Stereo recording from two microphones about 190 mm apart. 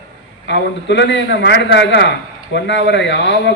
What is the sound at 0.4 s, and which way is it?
A man's voice, 65° left (ahead or behind).